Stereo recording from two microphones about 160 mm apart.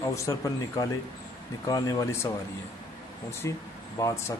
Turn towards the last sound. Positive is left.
turn(degrees=20)  # may be behind; listen again after turning